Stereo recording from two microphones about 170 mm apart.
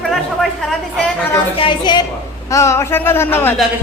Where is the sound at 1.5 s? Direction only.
30° left (ahead or behind); by 3.5 s 15° left (ahead or behind).